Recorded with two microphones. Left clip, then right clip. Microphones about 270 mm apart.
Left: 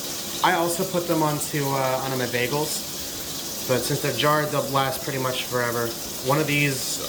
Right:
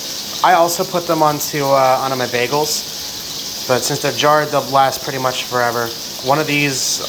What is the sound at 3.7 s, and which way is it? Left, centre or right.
Speech, centre.